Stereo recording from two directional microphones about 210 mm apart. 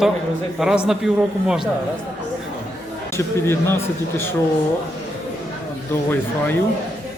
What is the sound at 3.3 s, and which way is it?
Speech, 10° left (ahead or behind).